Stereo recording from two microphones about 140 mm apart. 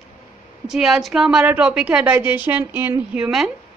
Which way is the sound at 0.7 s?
5° right (ahead or behind).